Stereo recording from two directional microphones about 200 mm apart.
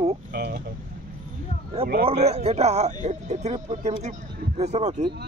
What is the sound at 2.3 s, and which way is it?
A man's voice, 30° right (ahead or behind).